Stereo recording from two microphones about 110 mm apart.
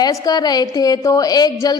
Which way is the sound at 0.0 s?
35° left (ahead or behind).